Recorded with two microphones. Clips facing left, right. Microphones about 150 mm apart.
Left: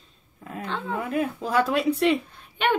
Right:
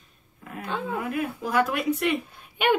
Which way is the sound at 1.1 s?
30° left (ahead or behind).